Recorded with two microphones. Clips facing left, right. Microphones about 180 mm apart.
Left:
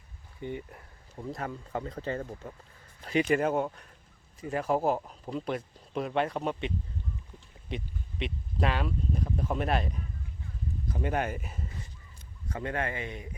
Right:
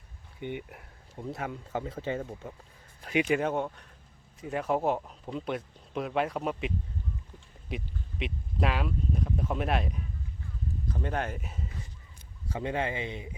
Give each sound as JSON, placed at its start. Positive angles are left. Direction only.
{"t": 0.7, "sound": "speech", "side_deg": -5}
{"t": 3.3, "sound": "speech", "side_deg": 5}
{"t": 10.9, "sound": "speech", "side_deg": 10}
{"t": 12.6, "sound": "speech", "side_deg": -25}